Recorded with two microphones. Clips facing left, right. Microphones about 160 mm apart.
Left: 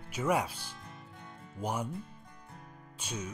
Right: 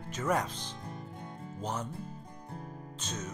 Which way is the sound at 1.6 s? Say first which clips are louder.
Left 2 dB; 10° left (ahead or behind).